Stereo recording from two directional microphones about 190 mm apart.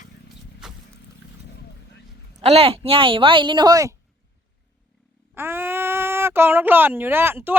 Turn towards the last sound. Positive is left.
turn(degrees=-10)  # may be behind; listen again after turning